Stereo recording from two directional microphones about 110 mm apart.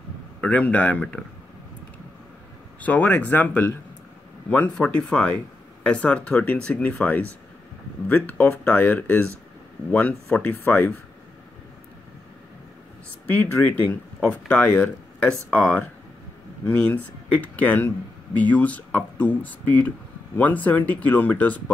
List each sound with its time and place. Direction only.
0.4 s speech: 15° left (ahead or behind)
2.8 s speech: 15° left (ahead or behind)
13.3 s speech: 15° left (ahead or behind)